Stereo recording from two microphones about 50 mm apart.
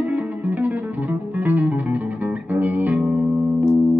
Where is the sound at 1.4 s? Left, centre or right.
Right.